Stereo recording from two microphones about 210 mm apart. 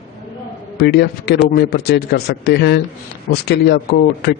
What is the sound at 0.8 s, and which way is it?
Speech, 50° left (ahead or behind).